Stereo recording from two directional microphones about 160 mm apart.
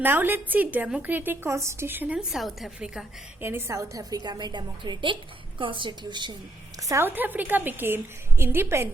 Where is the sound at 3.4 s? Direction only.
15° right (ahead or behind).